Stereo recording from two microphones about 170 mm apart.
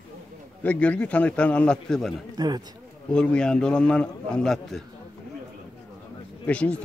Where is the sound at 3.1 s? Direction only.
5° left (ahead or behind).